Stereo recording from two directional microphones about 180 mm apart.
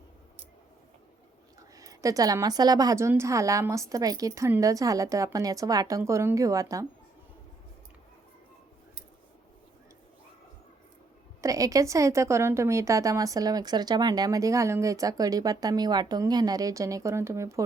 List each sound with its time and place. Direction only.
1.7 s a woman's voice: 20° right (ahead or behind)
11.3 s a woman's voice: 20° right (ahead or behind)